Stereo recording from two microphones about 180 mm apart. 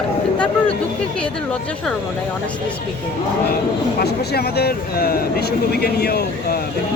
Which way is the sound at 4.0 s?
60° left (ahead or behind).